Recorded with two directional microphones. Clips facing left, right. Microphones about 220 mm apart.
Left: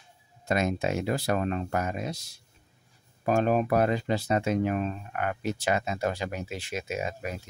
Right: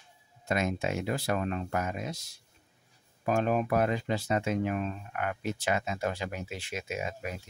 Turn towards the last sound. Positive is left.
turn(degrees=40)  # may be behind; listen again after turning